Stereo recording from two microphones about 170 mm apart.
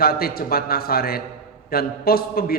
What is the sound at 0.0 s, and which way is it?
A man's voice, 60° left (ahead or behind).